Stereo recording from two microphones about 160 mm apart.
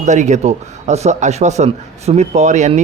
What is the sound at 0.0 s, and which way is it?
Speech, 50° right (ahead or behind).